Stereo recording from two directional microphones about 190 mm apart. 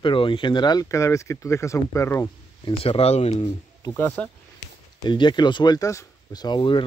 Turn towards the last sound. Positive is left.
turn(degrees=25)  # may be behind; listen again after turning